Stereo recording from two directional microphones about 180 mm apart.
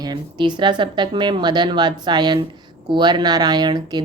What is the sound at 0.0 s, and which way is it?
Speech, 25° right (ahead or behind).